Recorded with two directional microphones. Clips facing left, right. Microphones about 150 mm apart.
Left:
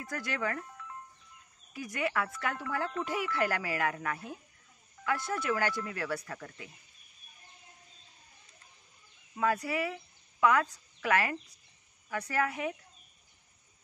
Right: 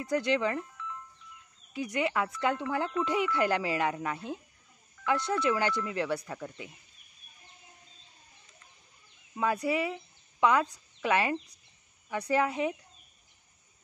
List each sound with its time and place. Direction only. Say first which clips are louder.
0.1 s speech: right 7 dB; 20° right (ahead or behind)
1.7 s speech: right 4 dB; 25° right (ahead or behind)
9.4 s speech: right 2 dB; 20° right (ahead or behind)